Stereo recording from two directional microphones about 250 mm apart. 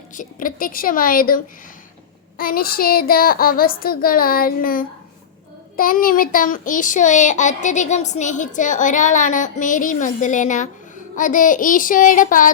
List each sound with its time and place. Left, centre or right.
0.1 s speech: left
2.4 s a child's voice: left